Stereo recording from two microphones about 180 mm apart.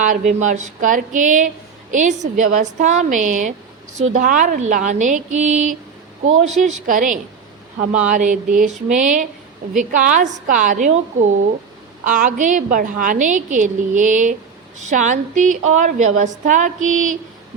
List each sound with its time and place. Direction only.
0.0 s a woman's voice: 45° right (ahead or behind)